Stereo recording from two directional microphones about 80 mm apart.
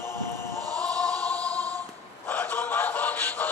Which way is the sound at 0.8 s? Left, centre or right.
Centre.